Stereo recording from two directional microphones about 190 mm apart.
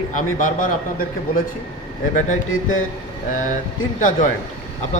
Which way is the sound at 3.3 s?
40° left (ahead or behind).